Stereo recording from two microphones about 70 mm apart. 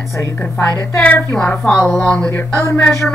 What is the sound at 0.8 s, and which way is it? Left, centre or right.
Speech, left.